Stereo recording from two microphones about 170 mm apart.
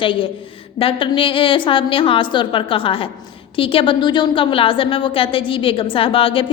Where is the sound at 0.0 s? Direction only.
30° left (ahead or behind).